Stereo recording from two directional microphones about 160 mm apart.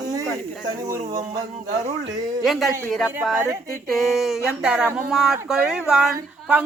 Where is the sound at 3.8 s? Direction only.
Centre (ahead or behind).